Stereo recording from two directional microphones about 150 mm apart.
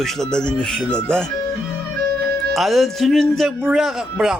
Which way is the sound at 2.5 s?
Centre (ahead or behind).